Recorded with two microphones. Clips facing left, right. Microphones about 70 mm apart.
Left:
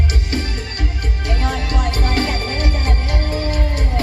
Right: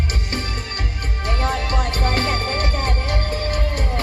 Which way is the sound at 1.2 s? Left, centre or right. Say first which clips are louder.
Right 1 dB; right.